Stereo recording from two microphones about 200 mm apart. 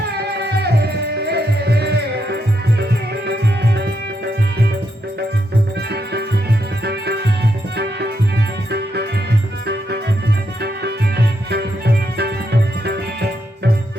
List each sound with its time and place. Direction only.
0.1 s music: 55° right (ahead or behind)
6.8 s music: 55° right (ahead or behind)
10.6 s music: 55° right (ahead or behind)